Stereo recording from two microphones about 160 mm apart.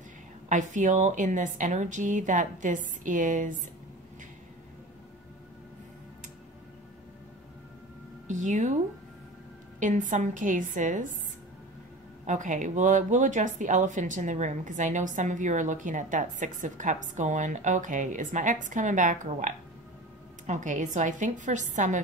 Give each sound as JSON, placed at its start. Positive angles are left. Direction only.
{"t": 0.5, "sound": "speech", "side_deg": -50}
{"t": 8.3, "sound": "a woman's voice", "side_deg": -50}
{"t": 9.8, "sound": "speech", "side_deg": -50}
{"t": 12.3, "sound": "speech", "side_deg": -50}